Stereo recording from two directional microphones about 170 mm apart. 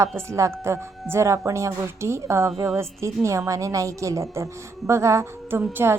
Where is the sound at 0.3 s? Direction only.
15° right (ahead or behind).